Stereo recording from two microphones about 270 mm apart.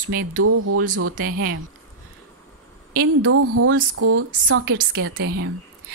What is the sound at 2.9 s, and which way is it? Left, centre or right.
A woman's voice, right.